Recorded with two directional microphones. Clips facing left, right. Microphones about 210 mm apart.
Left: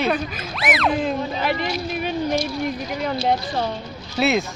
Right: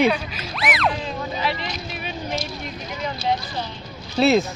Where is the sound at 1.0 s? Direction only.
55° left (ahead or behind).